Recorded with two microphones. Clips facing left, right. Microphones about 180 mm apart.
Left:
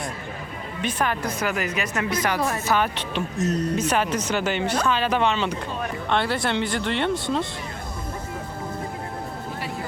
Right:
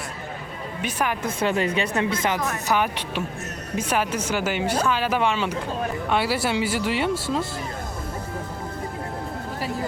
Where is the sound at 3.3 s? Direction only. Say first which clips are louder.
Left 11 dB; 35° left (ahead or behind).